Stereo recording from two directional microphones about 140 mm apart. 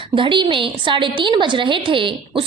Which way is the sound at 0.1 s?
35° right (ahead or behind).